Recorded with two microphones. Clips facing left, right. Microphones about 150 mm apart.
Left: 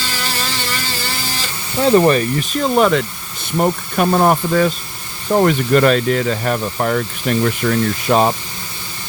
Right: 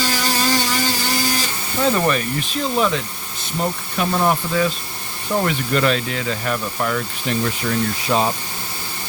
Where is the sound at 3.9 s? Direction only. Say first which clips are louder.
Left 5 dB; 50° left (ahead or behind).